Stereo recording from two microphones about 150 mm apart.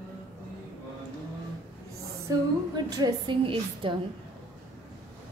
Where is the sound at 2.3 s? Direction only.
25° right (ahead or behind).